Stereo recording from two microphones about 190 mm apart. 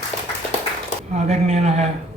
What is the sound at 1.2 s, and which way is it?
Speech, 35° right (ahead or behind).